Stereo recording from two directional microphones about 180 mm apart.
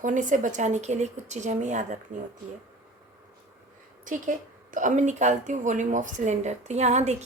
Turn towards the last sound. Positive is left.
turn(degrees=-40)  # may be behind; listen again after turning